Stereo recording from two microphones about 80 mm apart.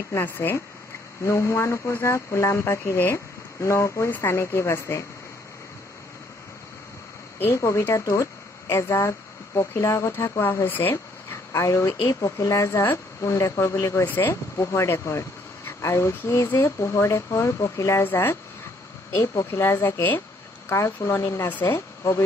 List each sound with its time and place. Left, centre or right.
0.2 s speech: left
7.3 s a woman's voice: left
7.9 s speech: left
14.0 s speech: left
14.6 s speech: left
18.0 s speech: left
19.1 s speech: left
21.5 s speech: left
21.7 s speech: left